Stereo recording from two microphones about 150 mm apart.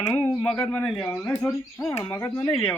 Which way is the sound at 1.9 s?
20° left (ahead or behind).